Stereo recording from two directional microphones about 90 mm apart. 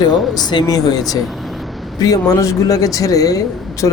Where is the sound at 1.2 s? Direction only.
Centre (ahead or behind).